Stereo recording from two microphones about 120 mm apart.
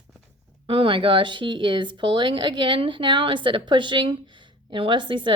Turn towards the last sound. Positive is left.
turn(degrees=-40)  # may be behind; listen again after turning